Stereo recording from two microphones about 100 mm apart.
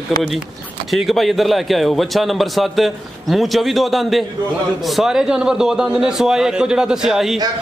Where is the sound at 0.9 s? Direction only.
Centre (ahead or behind).